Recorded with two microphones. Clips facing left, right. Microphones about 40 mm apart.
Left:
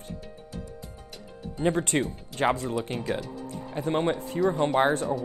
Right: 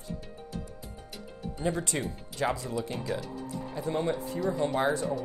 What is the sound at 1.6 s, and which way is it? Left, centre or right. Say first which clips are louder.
Speech: left 6 dB; left.